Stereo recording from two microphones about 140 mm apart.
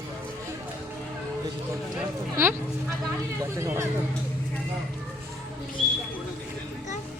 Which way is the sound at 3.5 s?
20° right (ahead or behind).